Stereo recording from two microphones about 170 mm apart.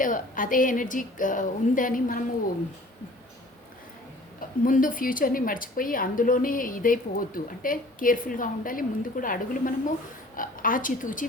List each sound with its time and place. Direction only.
0.0 s a woman's voice: 50° left (ahead or behind)
4.4 s a woman's voice: 55° left (ahead or behind)